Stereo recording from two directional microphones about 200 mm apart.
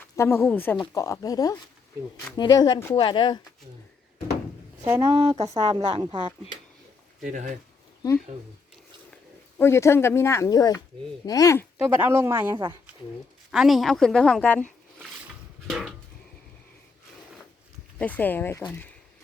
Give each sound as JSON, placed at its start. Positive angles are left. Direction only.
{"t": 0.0, "sound": "speech", "side_deg": 10}
{"t": 5.1, "sound": "a woman's voice", "side_deg": -30}
{"t": 7.2, "sound": "speech", "side_deg": -40}
{"t": 9.6, "sound": "speech", "side_deg": 15}
{"t": 11.9, "sound": "speech", "side_deg": -10}
{"t": 13.5, "sound": "a woman's voice", "side_deg": 0}
{"t": 15.7, "sound": "a woman's voice", "side_deg": 0}
{"t": 18.0, "sound": "speech", "side_deg": 10}